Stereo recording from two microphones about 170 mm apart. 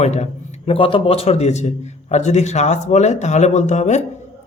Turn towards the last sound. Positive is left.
turn(degrees=45)  # may be behind; listen again after turning